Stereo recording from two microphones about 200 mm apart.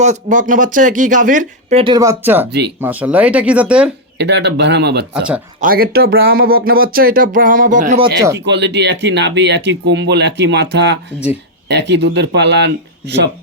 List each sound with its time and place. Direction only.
0.0 s speech: 35° right (ahead or behind)
1.8 s speech: 20° right (ahead or behind)
2.5 s speech: 55° right (ahead or behind)
2.8 s speech: 10° right (ahead or behind)
4.2 s speech: 60° right (ahead or behind); by 7.9 s 40° right (ahead or behind)
8.4 s speech: 60° right (ahead or behind)